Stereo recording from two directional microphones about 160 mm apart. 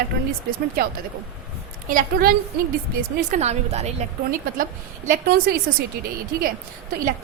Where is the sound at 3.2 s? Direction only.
45° right (ahead or behind).